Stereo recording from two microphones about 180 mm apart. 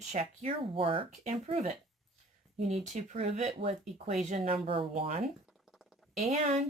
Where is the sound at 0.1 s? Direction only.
35° right (ahead or behind).